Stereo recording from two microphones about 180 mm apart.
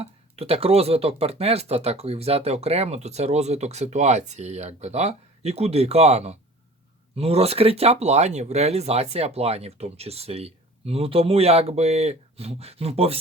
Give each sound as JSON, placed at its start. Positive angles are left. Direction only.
{"t": 0.0, "sound": "speech", "side_deg": -35}